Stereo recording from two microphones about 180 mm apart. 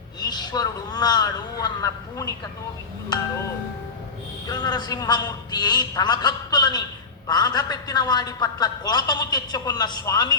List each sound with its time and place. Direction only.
0.2 s a man's voice: 25° left (ahead or behind)
4.4 s a man's voice: 20° left (ahead or behind)